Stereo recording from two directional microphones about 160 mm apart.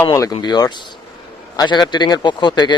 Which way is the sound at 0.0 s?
20° left (ahead or behind).